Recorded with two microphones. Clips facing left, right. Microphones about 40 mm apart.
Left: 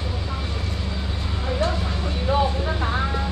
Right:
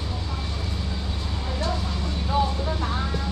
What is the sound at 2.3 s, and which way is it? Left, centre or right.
Vehicle, left.